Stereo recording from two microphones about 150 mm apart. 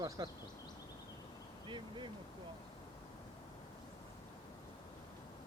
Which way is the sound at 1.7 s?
30° right (ahead or behind).